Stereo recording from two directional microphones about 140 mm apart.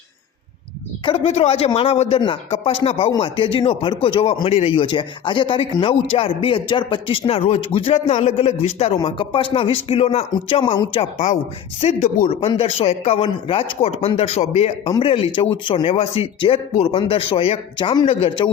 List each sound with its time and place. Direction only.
1.0 s speech: 45° left (ahead or behind)
9.0 s speech: 35° left (ahead or behind)
11.9 s speech: 75° left (ahead or behind)
12.3 s speech: 45° left (ahead or behind)